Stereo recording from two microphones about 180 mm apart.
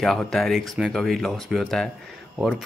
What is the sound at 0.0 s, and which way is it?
Speech, centre (ahead or behind).